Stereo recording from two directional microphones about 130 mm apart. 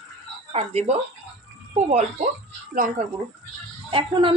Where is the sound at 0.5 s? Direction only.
55° right (ahead or behind).